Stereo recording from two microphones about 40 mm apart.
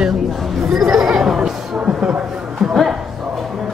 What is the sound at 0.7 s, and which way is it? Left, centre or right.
Chatter, centre.